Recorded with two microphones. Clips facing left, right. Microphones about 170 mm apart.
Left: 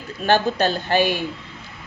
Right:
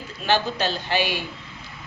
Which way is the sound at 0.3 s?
50° left (ahead or behind).